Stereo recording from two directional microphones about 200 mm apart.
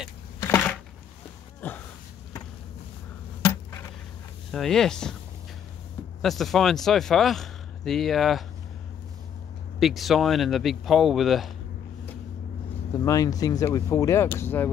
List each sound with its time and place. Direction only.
1.6 s a sound: 10° left (ahead or behind)
4.5 s speech: centre (ahead or behind)
6.2 s speech: centre (ahead or behind)
9.8 s speech: centre (ahead or behind)
13.0 s speech: 15° left (ahead or behind)